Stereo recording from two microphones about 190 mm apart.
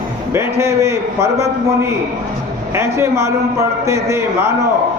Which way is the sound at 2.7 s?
15° right (ahead or behind).